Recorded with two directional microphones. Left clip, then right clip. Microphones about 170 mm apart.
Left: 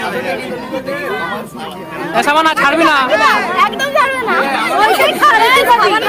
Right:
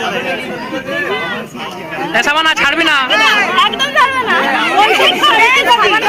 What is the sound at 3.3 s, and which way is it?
Speech, 55° left (ahead or behind).